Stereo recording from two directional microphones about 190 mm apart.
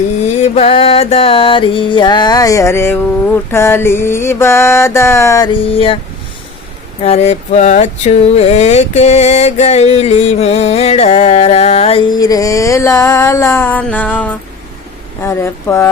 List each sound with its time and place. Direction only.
0.3 s music: 35° left (ahead or behind); by 3.0 s 10° left (ahead or behind)
3.5 s mantra: 10° left (ahead or behind); by 6.0 s 30° left (ahead or behind)
7.0 s speech: 35° left (ahead or behind); by 14.3 s 10° left (ahead or behind)
15.2 s mantra: 10° left (ahead or behind)